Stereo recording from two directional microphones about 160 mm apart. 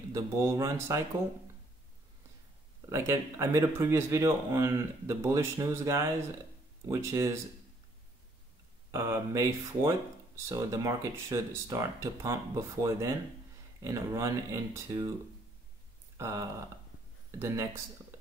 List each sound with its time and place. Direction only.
0.1 s speech: 20° right (ahead or behind)
2.9 s speech: 20° right (ahead or behind)
8.9 s speech: 20° right (ahead or behind)
16.2 s speech: 15° right (ahead or behind)